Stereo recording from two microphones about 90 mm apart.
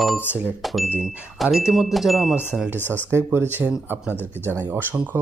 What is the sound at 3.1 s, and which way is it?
Speech, 25° right (ahead or behind).